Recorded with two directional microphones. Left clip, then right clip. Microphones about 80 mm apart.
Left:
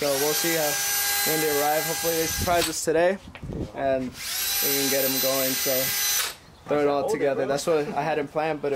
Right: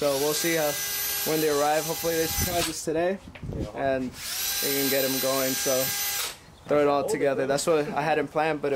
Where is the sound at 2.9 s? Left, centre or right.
Centre.